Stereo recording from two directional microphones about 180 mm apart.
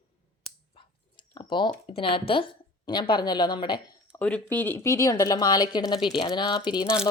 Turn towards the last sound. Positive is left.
turn(degrees=25)  # may be behind; listen again after turning